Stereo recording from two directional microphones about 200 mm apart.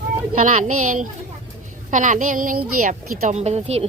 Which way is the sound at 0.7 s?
90° right.